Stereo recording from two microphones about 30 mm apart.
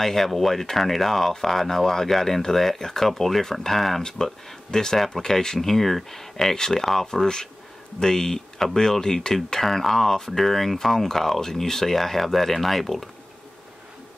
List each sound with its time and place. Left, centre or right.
0.0 s speech: centre
4.0 s speech: left